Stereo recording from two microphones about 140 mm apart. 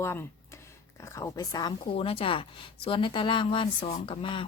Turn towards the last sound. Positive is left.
turn(degrees=40)  # may be behind; listen again after turning